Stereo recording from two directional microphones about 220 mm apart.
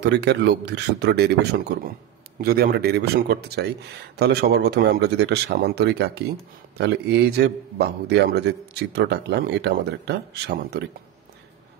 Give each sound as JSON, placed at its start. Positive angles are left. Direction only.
{"t": 0.0, "sound": "a man's voice", "side_deg": -50}